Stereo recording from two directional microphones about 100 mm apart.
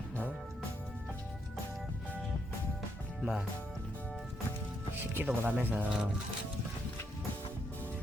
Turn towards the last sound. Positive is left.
turn(degrees=-10)  # may be behind; listen again after turning